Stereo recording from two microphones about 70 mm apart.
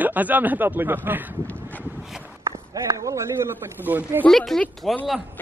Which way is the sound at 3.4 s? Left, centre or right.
Right.